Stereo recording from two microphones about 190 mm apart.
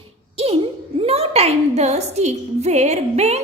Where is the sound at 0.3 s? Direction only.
30° right (ahead or behind).